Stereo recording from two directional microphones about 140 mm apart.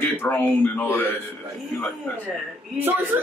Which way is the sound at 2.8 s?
15° right (ahead or behind).